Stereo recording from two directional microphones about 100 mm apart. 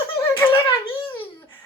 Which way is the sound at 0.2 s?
25° left (ahead or behind).